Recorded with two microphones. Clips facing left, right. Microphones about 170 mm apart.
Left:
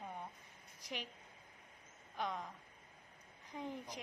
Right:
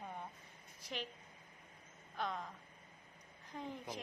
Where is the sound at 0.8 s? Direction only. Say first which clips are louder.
Right 2 dB; 15° left (ahead or behind).